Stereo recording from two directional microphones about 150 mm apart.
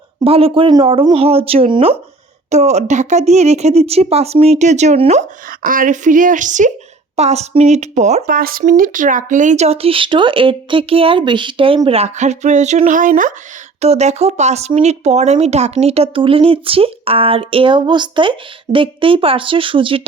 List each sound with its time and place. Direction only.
0.3 s speech: 40° right (ahead or behind)
2.5 s speech: 50° right (ahead or behind)
5.5 s speech: 65° right (ahead or behind); by 8.2 s 50° right (ahead or behind)
8.3 s speech: 75° right (ahead or behind)
13.8 s speech: 45° right (ahead or behind)